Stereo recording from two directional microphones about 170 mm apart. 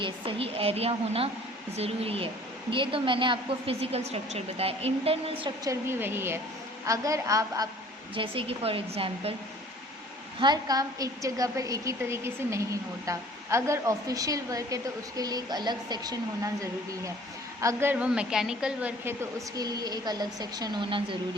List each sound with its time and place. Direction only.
0.0 s a woman's voice: 35° right (ahead or behind)
5.6 s a woman's voice: 15° right (ahead or behind)
8.1 s a woman's voice: 30° right (ahead or behind)
10.4 s a woman's voice: 25° right (ahead or behind)
17.6 s a woman's voice: 15° right (ahead or behind)
19.5 s a woman's voice: 20° right (ahead or behind)